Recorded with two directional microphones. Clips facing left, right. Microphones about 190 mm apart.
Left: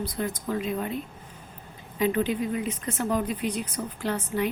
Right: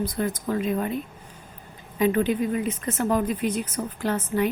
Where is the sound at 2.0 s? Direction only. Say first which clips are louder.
Right 3 dB; 50° right (ahead or behind).